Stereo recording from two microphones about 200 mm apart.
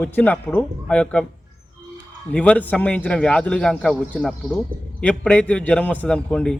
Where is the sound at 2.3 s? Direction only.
5° left (ahead or behind).